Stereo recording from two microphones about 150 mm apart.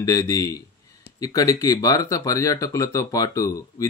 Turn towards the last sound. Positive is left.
turn(degrees=20)  # may be behind; listen again after turning